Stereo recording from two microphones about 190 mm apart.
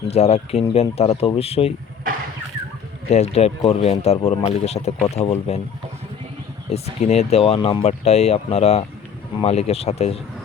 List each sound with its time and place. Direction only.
0.1 s speech: 35° left (ahead or behind)
3.1 s speech: 35° left (ahead or behind)
6.7 s speech: 35° left (ahead or behind)